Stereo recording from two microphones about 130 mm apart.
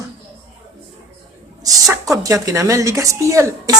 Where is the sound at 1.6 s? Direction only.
25° right (ahead or behind).